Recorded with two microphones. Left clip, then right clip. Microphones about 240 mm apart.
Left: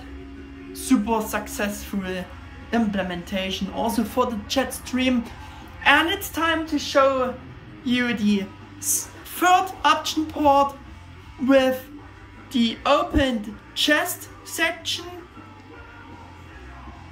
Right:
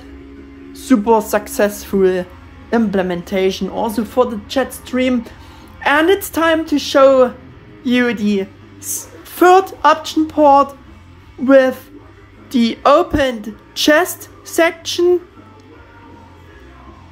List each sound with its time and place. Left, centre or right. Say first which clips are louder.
0.7 s speech: right 9 dB; centre
7.8 s speech: right 7 dB; centre
9.3 s speech: right 8 dB; right